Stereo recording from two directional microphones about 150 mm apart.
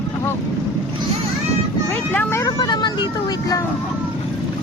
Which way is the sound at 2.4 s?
30° left (ahead or behind).